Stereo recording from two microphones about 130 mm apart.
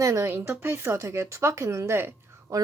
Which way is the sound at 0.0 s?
25° right (ahead or behind).